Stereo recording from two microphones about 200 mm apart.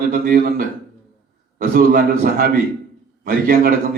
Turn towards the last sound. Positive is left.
turn(degrees=-50)  # may be behind; listen again after turning